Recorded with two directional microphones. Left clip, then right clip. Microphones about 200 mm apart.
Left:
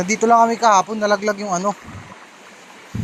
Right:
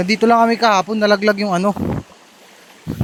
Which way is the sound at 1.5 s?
45° right (ahead or behind).